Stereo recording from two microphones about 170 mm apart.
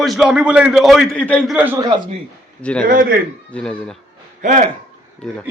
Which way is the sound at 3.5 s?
5° left (ahead or behind).